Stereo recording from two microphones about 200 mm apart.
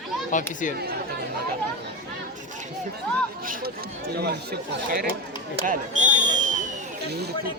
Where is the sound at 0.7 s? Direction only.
50° right (ahead or behind).